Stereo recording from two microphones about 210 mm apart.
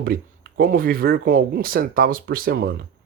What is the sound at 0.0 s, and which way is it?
Speech, 45° right (ahead or behind).